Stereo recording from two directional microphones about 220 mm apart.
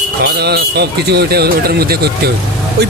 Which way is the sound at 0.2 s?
45° right (ahead or behind).